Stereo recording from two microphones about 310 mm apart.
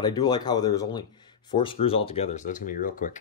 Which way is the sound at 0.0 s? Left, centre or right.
Centre.